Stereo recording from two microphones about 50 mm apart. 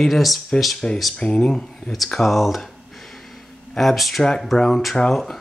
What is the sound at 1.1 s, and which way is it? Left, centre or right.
Speech, centre.